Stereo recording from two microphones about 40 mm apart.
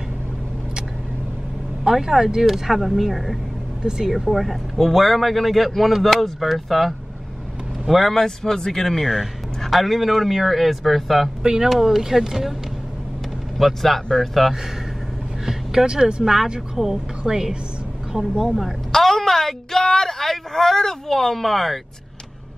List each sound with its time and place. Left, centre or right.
1.9 s speech: centre
8.0 s speech: centre
9.0 s speech: centre
11.4 s speech: centre
11.7 s speech: centre
13.6 s speech: centre
15.4 s speech: centre
18.4 s speech: centre
18.9 s a woman's voice: centre